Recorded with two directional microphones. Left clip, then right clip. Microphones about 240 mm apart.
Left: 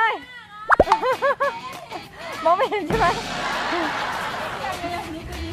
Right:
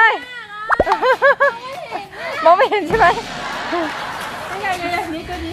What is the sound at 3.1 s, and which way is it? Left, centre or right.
Speech, centre.